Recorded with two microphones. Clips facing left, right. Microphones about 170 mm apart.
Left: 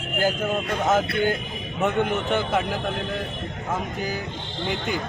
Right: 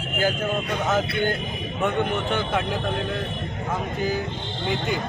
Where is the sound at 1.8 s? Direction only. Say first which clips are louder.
Left 1 dB; 5° left (ahead or behind).